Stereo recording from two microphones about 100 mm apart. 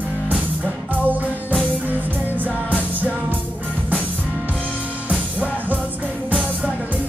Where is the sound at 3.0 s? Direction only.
15° right (ahead or behind).